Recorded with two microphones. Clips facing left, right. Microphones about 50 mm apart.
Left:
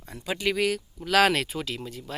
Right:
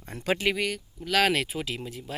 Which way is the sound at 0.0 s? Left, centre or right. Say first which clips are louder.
Right 4 dB; right.